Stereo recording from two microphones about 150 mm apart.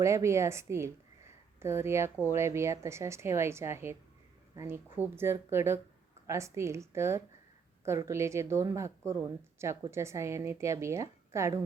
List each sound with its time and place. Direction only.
0.0 s a woman's voice: 20° right (ahead or behind)